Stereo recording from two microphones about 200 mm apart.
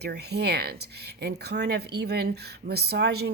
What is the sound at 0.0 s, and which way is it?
Speech, 55° right (ahead or behind).